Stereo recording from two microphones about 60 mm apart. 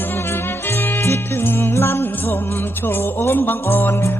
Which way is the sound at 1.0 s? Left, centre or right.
Left.